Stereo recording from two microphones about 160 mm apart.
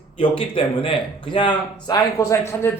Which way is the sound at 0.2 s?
30° left (ahead or behind).